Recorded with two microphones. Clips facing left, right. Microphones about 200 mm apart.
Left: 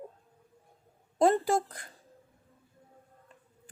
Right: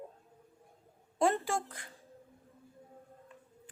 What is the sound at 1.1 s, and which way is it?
Speech, 40° left (ahead or behind).